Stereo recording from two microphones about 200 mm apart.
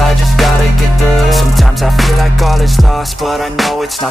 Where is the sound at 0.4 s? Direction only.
Centre (ahead or behind).